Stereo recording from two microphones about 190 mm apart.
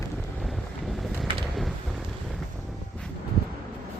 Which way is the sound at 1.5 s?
Centre (ahead or behind).